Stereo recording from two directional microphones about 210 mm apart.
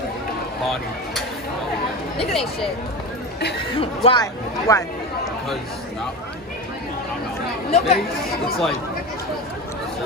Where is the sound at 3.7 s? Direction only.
25° left (ahead or behind).